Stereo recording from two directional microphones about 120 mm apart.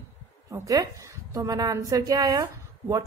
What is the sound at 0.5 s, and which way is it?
A woman's voice, 30° right (ahead or behind).